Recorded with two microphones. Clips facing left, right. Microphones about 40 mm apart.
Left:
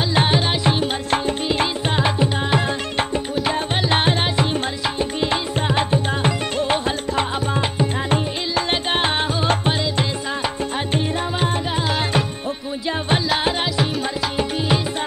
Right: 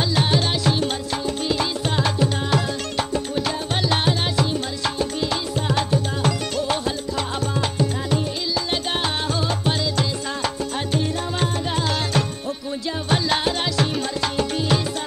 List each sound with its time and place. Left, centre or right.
0.1 s music: left
9.7 s music: left
11.7 s music: centre
13.4 s music: left